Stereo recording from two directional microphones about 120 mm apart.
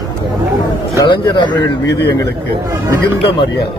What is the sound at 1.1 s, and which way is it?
A man's voice, 40° left (ahead or behind).